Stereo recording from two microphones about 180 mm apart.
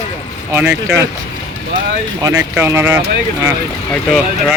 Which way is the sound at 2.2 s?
15° right (ahead or behind).